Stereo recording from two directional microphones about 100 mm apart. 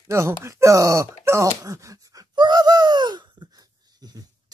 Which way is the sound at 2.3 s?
45° right (ahead or behind).